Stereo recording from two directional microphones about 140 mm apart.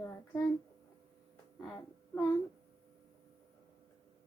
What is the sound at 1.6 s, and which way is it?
Speech, 15° left (ahead or behind).